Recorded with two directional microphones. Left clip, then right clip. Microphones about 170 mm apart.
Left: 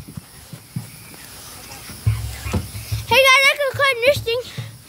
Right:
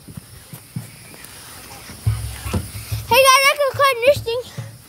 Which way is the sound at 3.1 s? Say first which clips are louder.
Even; 10° right (ahead or behind).